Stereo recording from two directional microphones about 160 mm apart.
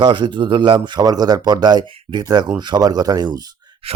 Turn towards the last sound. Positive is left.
turn(degrees=-25)  # may be behind; listen again after turning